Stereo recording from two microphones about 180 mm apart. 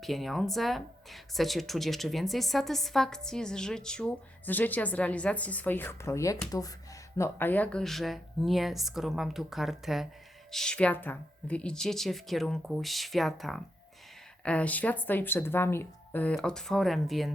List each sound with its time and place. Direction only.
0.0 s speech: centre (ahead or behind)